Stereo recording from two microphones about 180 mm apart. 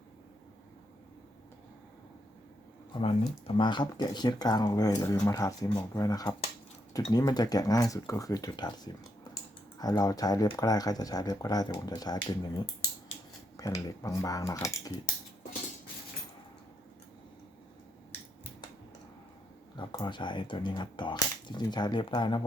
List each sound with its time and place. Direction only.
2.9 s speech: 30° left (ahead or behind)
13.6 s speech: 20° left (ahead or behind)
19.7 s speech: 25° left (ahead or behind)